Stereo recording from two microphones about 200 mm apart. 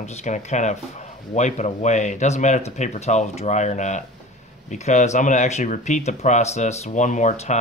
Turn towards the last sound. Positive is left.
turn(degrees=35)  # may be behind; listen again after turning